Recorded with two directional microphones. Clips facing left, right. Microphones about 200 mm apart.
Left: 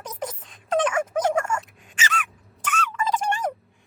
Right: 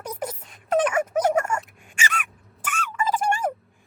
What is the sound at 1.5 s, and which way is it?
Squeak, 10° right (ahead or behind).